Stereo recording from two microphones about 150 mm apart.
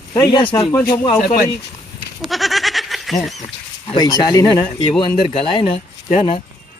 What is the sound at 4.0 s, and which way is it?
Speech, 25° left (ahead or behind).